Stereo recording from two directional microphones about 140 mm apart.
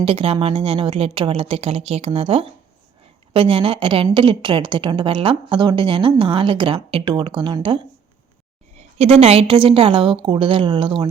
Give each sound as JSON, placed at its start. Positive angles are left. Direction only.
{"t": 0.0, "sound": "a woman's voice", "side_deg": -45}
{"t": 9.0, "sound": "a woman's voice", "side_deg": -45}